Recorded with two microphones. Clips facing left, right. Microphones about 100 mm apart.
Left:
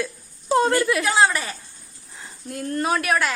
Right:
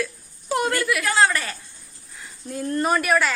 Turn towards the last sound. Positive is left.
turn(degrees=0)  # may be behind; listen again after turning